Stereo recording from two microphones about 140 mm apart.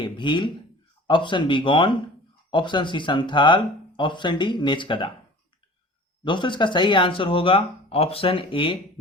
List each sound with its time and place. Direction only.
0.0 s speech: 35° left (ahead or behind)
6.2 s speech: 35° left (ahead or behind)